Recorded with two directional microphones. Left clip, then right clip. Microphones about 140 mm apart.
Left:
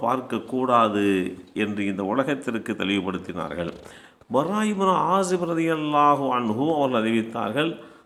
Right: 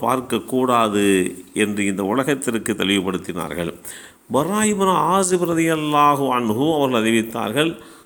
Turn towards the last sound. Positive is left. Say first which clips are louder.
# right 4 dB
turn(degrees=-35)  # may be behind; listen again after turning